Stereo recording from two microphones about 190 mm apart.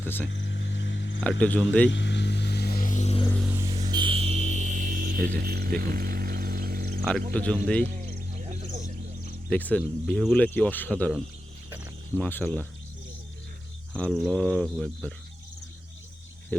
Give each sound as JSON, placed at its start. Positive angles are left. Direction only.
{"t": 0.0, "sound": "speech", "side_deg": 10}
{"t": 0.3, "sound": "a sound", "side_deg": 70}
{"t": 1.2, "sound": "speech", "side_deg": 5}
{"t": 1.9, "sound": "vehicle", "side_deg": 70}
{"t": 3.4, "sound": "vehicle", "side_deg": -10}
{"t": 3.8, "sound": "music", "side_deg": -25}
{"t": 7.3, "sound": "speech", "side_deg": 5}
{"t": 8.0, "sound": "a sound", "side_deg": -40}
{"t": 9.5, "sound": "speech", "side_deg": 5}
{"t": 13.9, "sound": "speech", "side_deg": 5}
{"t": 16.5, "sound": "speech", "side_deg": 10}